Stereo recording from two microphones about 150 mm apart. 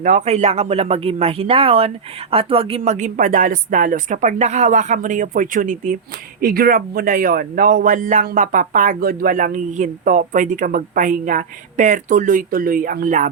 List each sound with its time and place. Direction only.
0.0 s speech: 55° right (ahead or behind)
6.4 s speech: 80° right; by 13.3 s 60° right (ahead or behind)